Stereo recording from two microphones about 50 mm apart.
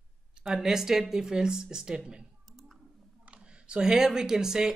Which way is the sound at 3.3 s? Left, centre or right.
Centre.